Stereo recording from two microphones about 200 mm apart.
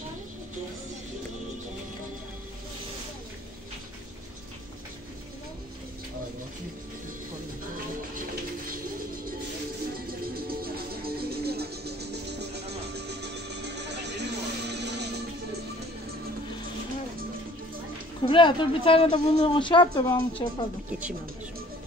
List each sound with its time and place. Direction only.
8.6 s bird: 45° right (ahead or behind)
9.9 s music: 50° right (ahead or behind)
18.2 s speech: 25° left (ahead or behind)